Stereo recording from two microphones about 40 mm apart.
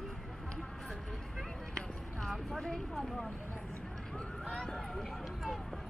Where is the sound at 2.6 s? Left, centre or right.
Centre.